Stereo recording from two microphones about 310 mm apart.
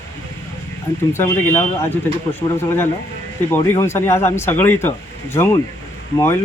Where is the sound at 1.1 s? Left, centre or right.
Centre.